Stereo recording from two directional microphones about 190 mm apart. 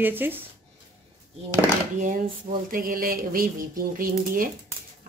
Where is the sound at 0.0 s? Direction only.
10° right (ahead or behind).